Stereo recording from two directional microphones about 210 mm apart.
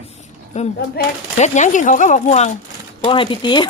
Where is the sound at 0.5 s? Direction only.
35° left (ahead or behind).